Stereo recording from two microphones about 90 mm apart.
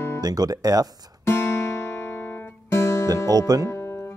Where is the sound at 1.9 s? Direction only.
25° left (ahead or behind).